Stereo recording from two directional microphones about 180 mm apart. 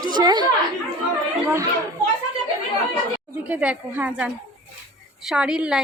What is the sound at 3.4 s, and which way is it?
A woman's voice, 5° right (ahead or behind).